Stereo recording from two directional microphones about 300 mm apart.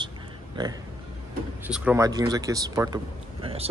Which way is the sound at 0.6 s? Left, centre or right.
Centre.